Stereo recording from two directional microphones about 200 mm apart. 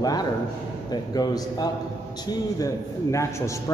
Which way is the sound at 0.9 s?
20° left (ahead or behind).